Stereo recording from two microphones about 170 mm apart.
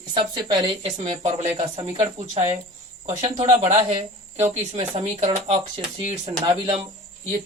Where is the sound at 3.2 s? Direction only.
25° right (ahead or behind).